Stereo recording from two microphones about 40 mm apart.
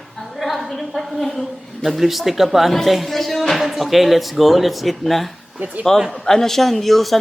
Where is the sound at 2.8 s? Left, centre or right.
Centre.